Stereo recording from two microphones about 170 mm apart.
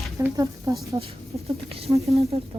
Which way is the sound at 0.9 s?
30° right (ahead or behind).